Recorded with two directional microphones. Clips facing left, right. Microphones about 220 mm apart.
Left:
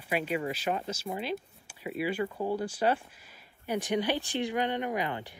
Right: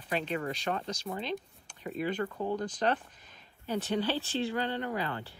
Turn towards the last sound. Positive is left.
turn(degrees=15)  # may be behind; listen again after turning